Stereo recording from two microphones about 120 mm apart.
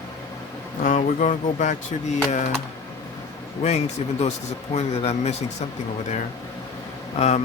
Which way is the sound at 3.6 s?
65° left (ahead or behind).